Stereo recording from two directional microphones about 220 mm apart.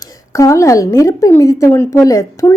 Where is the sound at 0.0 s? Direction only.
15° left (ahead or behind).